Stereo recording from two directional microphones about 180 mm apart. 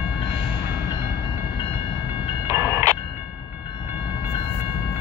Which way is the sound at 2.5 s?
15° right (ahead or behind).